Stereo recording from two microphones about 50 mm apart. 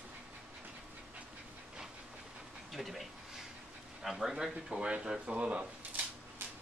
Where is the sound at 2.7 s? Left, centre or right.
Centre; by 5.6 s right.